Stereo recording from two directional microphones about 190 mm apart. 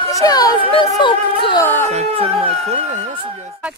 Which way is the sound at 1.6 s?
10° left (ahead or behind).